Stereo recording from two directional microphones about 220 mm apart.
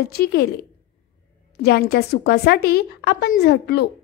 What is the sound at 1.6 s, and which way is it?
A woman's voice, 45° left (ahead or behind).